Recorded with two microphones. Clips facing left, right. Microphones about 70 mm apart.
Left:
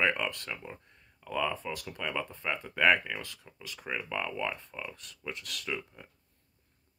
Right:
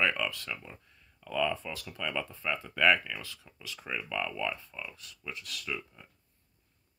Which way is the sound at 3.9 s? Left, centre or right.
Left.